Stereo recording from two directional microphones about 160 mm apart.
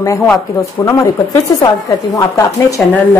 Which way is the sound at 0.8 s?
20° left (ahead or behind).